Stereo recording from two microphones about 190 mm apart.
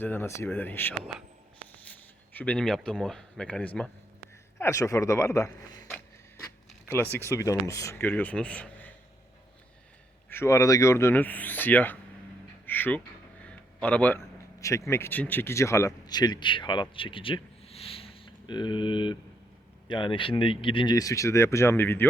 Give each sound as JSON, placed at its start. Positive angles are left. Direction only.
{"t": 0.0, "sound": "speech", "side_deg": 10}
{"t": 10.2, "sound": "speech", "side_deg": 15}
{"t": 12.6, "sound": "a sound", "side_deg": 10}
{"t": 13.8, "sound": "speech", "side_deg": 10}